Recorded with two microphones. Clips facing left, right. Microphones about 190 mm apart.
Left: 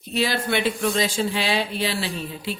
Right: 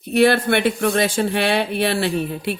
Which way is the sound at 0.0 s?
60° right (ahead or behind).